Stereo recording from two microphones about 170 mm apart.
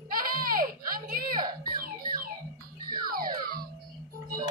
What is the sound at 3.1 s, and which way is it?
Music, 60° right (ahead or behind).